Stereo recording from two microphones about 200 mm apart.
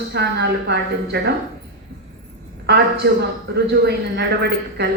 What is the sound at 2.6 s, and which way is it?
A woman's voice, 55° right (ahead or behind).